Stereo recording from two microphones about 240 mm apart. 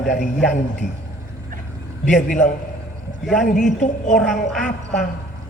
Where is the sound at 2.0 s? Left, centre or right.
Left.